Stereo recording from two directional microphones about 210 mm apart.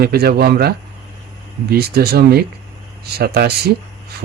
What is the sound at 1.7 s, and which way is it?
Speech, 45° right (ahead or behind).